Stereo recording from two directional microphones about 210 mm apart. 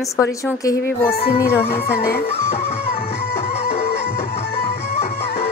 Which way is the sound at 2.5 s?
30° left (ahead or behind).